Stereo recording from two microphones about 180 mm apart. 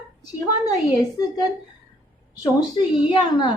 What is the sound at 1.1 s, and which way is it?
A woman's voice, 20° left (ahead or behind).